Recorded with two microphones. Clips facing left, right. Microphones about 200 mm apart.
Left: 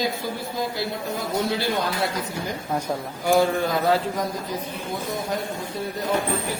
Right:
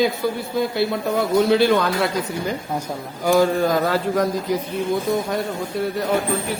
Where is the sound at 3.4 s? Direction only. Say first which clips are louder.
Right 6 dB; 45° right (ahead or behind).